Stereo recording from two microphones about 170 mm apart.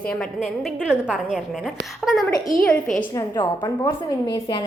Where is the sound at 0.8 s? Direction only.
5° right (ahead or behind).